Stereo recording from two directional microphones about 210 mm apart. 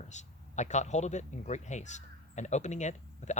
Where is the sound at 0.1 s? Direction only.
35° left (ahead or behind).